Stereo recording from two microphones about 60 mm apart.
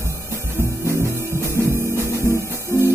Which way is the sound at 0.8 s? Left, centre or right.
Right.